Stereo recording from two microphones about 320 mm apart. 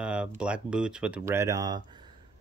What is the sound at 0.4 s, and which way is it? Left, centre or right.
Speech, centre.